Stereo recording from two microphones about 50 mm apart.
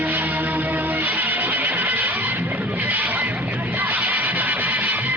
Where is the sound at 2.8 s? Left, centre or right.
Right.